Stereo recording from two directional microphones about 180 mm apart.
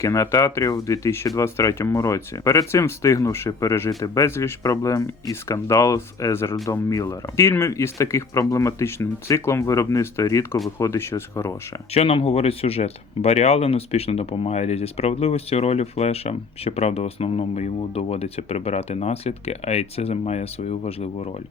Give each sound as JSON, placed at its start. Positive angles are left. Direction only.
{"t": 0.0, "sound": "speech", "side_deg": 15}
{"t": 11.9, "sound": "speech", "side_deg": 30}